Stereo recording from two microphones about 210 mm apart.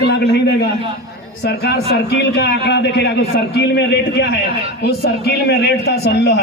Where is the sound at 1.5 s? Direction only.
50° left (ahead or behind).